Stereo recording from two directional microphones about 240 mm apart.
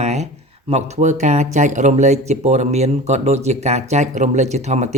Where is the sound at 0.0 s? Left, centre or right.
Right.